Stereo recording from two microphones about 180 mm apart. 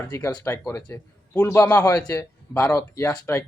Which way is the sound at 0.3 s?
15° left (ahead or behind).